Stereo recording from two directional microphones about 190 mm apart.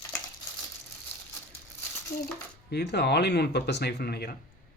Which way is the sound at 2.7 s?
60° left (ahead or behind).